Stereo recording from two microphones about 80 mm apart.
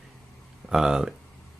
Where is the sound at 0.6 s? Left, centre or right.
Centre.